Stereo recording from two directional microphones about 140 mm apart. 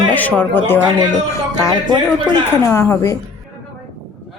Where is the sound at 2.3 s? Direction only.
20° left (ahead or behind).